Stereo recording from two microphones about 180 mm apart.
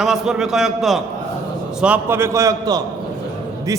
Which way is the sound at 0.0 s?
5° right (ahead or behind).